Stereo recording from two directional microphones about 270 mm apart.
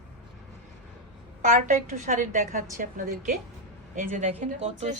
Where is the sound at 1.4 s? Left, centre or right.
Right.